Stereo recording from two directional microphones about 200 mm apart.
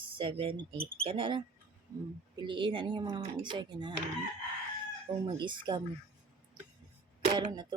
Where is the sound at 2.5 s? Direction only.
25° right (ahead or behind).